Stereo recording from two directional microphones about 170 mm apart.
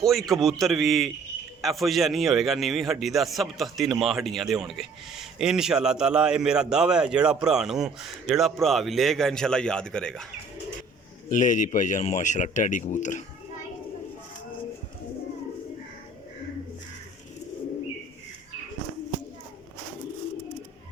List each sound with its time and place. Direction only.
0.0 s a man's voice: centre (ahead or behind)
11.3 s speech: 50° left (ahead or behind)